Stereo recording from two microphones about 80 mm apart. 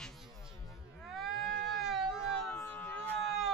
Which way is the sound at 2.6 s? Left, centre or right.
Left.